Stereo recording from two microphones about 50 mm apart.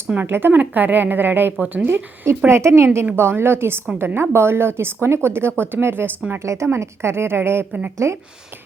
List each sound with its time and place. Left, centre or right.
0.2 s a woman's voice: right
0.5 s a woman's voice: right
2.5 s a woman's voice: right
6.4 s a woman's voice: right
6.7 s a woman's voice: right
8.0 s speech: right